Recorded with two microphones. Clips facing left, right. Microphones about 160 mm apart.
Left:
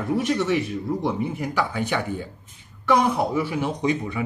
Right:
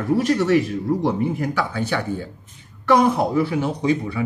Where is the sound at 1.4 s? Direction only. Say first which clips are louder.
Right 2 dB; 15° left (ahead or behind).